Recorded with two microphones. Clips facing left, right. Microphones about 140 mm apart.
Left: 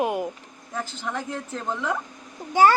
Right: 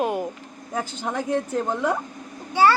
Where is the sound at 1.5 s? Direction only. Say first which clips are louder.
Right 5 dB; 15° right (ahead or behind).